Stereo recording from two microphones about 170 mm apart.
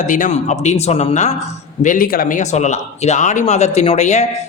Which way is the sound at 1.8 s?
50° left (ahead or behind).